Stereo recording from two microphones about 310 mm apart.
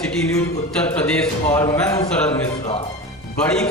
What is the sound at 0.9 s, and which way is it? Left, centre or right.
A man's voice, centre.